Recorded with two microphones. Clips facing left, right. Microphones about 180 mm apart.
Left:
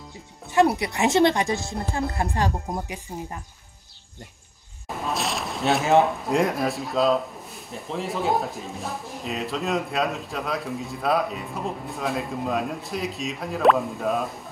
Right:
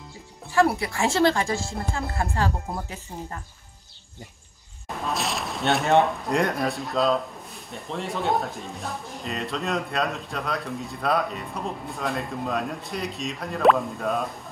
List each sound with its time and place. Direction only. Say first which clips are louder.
0.5 s speech: left 2 dB; 20° left (ahead or behind)
4.8 s speech: left 1 dB; centre (ahead or behind)